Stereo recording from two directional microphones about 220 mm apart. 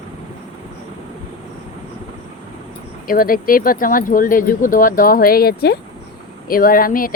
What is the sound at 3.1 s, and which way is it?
Speech, 40° left (ahead or behind).